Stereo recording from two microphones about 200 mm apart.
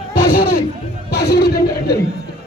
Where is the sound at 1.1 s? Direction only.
50° left (ahead or behind).